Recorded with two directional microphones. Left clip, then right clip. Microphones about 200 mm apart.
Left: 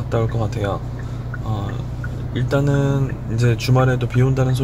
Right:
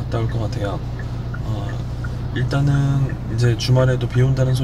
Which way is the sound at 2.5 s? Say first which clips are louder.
Left 5 dB; 60° left (ahead or behind).